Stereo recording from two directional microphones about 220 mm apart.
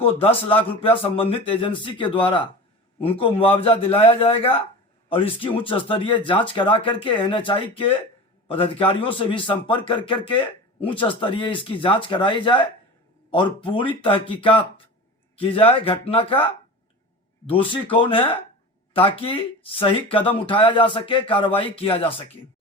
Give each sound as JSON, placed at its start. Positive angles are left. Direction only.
{"t": 0.0, "sound": "a man's voice", "side_deg": 25}